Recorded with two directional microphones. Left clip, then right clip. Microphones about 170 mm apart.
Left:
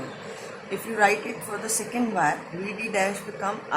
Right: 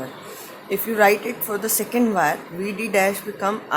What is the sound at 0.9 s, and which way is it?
A woman's voice, 60° right (ahead or behind).